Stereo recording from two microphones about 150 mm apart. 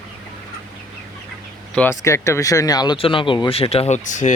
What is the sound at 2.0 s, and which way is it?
Speech, 20° left (ahead or behind).